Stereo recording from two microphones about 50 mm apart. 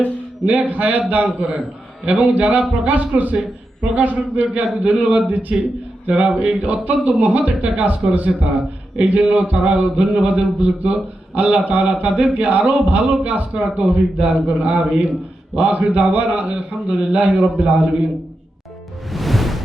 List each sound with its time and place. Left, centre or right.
0.6 s a man's voice: right
1.3 s a man's voice: right
19.1 s music: centre